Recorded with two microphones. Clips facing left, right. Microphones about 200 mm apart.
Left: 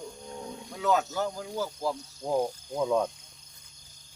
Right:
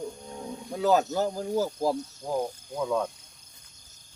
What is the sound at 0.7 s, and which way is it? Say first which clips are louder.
Speech: right 4 dB; 35° right (ahead or behind).